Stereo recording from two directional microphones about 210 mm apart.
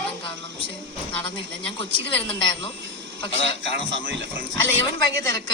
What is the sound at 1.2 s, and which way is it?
Speech, 55° right (ahead or behind).